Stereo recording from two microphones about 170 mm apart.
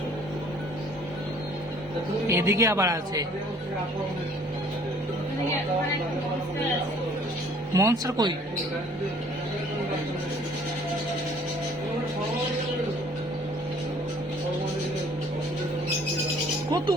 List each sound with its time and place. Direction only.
2.2 s speech: 15° right (ahead or behind)
7.7 s speech: 20° right (ahead or behind)